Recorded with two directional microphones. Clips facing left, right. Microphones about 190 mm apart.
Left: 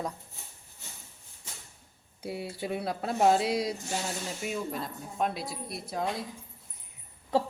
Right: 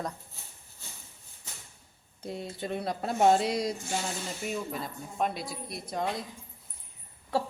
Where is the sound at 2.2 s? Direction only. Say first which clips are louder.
Left 1 dB; 10° left (ahead or behind).